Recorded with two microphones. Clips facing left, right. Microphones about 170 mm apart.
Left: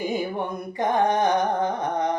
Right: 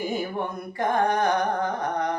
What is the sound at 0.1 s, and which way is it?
Music, 15° left (ahead or behind).